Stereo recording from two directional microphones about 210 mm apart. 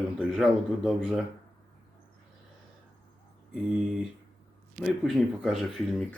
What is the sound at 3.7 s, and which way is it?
A man's voice, centre (ahead or behind).